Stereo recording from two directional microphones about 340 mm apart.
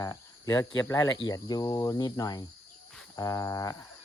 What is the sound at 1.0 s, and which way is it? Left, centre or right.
Speech, left.